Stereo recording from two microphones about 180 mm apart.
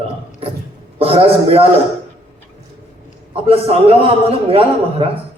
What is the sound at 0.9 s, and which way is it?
Speech, 30° right (ahead or behind).